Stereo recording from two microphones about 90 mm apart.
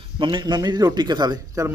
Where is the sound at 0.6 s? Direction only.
45° right (ahead or behind).